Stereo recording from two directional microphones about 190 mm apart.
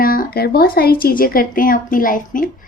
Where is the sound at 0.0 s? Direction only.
50° left (ahead or behind).